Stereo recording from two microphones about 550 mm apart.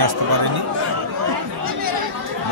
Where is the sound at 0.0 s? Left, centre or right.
Right.